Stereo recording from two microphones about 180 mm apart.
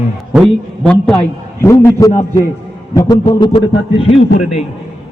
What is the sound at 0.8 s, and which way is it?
A man's voice, 5° left (ahead or behind).